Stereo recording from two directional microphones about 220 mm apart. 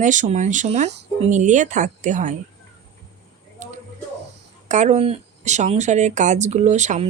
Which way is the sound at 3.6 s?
35° right (ahead or behind).